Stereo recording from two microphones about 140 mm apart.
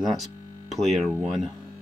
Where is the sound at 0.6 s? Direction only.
Centre (ahead or behind).